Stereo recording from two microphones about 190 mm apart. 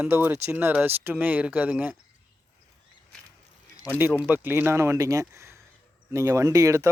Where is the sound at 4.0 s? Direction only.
5° right (ahead or behind).